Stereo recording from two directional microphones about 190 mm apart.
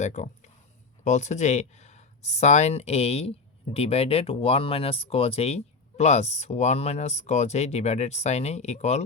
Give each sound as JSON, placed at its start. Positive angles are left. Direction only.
{"t": 0.0, "sound": "speech", "side_deg": 40}